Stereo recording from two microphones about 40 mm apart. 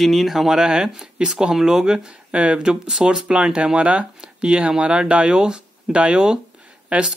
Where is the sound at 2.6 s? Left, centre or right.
Centre.